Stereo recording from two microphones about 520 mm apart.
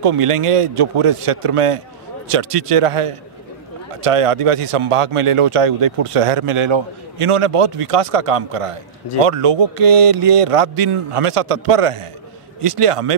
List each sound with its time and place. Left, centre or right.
0.0 s a man's voice: right